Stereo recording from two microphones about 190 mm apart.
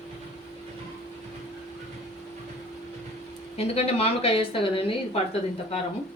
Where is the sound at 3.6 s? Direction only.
30° left (ahead or behind).